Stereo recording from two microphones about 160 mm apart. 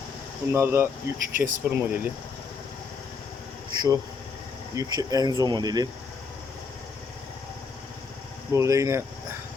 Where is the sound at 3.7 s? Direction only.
25° right (ahead or behind).